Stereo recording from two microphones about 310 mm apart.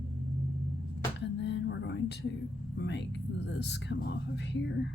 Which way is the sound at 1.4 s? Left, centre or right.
Left.